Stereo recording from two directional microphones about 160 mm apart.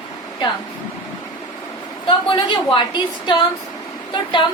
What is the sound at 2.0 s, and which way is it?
A woman's voice, 30° left (ahead or behind).